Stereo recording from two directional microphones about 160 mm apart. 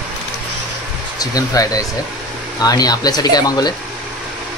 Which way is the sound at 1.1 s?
20° left (ahead or behind).